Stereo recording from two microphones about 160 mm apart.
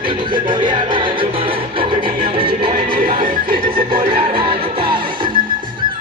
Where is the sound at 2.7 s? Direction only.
60° right (ahead or behind).